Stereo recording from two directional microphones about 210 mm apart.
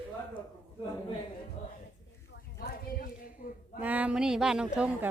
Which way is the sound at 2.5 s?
45° left (ahead or behind).